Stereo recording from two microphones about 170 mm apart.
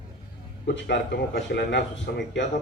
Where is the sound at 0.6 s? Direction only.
85° left.